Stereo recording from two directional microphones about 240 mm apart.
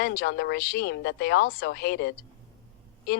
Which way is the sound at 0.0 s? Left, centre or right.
Left.